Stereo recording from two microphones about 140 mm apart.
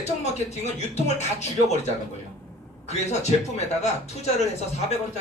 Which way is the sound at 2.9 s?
55° left (ahead or behind).